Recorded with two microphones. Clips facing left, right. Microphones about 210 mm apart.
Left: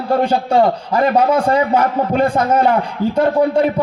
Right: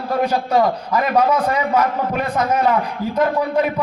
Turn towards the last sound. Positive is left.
turn(degrees=30)  # may be behind; listen again after turning